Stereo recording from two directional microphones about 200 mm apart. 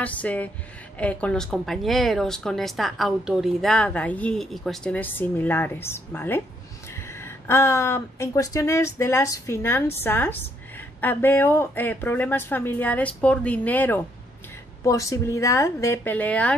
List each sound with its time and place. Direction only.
0.0 s a woman's voice: 5° left (ahead or behind)